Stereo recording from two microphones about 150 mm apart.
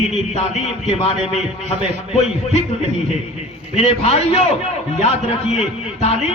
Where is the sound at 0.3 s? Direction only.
45° left (ahead or behind).